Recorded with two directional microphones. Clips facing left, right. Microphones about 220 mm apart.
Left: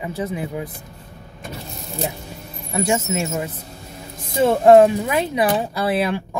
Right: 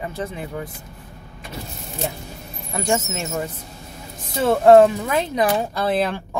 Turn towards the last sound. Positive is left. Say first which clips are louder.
# left 1 dB
turn(degrees=10)  # may be behind; listen again after turning